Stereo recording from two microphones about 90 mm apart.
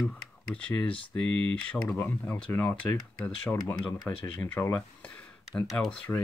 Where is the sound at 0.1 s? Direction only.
15° left (ahead or behind).